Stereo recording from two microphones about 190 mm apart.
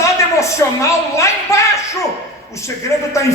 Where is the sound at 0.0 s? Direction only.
15° left (ahead or behind).